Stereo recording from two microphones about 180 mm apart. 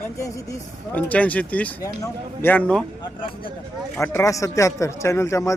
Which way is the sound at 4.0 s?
15° left (ahead or behind).